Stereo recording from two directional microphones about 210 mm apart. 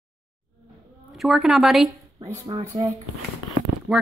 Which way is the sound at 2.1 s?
15° right (ahead or behind).